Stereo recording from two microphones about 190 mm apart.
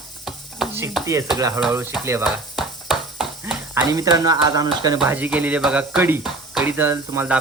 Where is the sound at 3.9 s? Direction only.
20° right (ahead or behind).